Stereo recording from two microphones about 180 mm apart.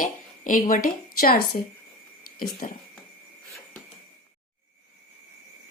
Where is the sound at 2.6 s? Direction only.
50° left (ahead or behind).